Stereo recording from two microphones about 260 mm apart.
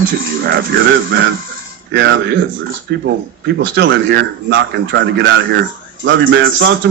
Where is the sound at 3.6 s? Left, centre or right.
Right.